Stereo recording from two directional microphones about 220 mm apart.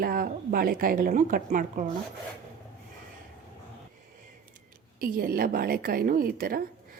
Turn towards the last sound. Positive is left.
turn(degrees=-40)  # may be behind; listen again after turning